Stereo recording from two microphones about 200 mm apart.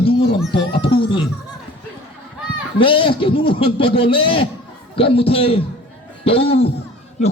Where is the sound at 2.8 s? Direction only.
25° left (ahead or behind).